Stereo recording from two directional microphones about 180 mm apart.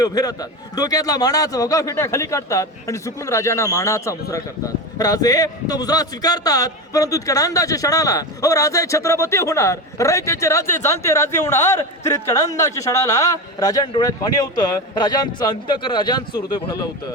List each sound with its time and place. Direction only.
0.0 s a man's voice: 20° left (ahead or behind)